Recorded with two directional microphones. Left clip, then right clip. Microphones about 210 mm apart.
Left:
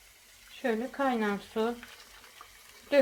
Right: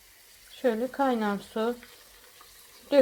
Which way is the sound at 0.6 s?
25° right (ahead or behind).